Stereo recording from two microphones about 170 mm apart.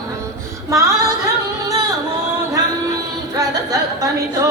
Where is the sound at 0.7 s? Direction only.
20° right (ahead or behind).